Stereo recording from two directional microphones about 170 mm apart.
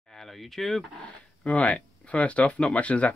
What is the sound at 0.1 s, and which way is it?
Speech, centre (ahead or behind).